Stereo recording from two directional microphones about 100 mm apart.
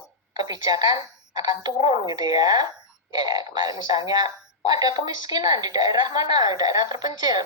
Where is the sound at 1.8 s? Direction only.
90° left.